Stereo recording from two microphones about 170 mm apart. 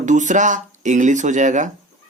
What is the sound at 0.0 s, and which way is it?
Speech, 45° right (ahead or behind).